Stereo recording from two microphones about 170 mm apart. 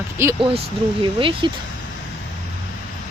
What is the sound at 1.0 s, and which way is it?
Speech, 30° right (ahead or behind).